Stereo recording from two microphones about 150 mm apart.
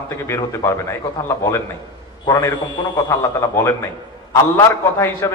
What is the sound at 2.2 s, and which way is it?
A man's voice, 25° left (ahead or behind).